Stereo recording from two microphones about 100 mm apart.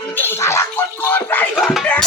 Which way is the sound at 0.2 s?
25° left (ahead or behind).